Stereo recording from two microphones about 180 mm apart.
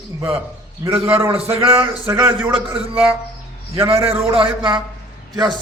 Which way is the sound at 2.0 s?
15° right (ahead or behind).